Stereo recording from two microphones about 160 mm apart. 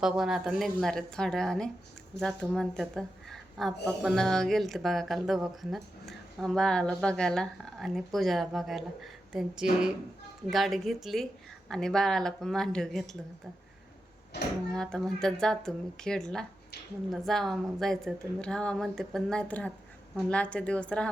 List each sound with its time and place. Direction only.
0.0 s a woman's voice: 5° right (ahead or behind)
14.3 s speech: 90° left
14.7 s speech: 5° left (ahead or behind)